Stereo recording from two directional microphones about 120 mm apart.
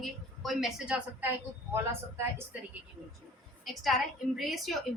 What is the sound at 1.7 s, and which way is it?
Speech, 20° right (ahead or behind).